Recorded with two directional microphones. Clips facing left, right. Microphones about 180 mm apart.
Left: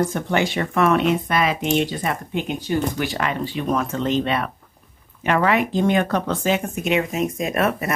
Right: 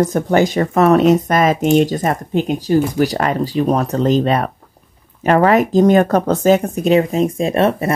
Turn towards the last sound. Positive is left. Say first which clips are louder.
# right 6 dB
turn(degrees=-30)  # may be behind; listen again after turning